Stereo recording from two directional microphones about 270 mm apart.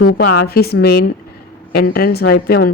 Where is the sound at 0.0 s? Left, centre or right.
Left.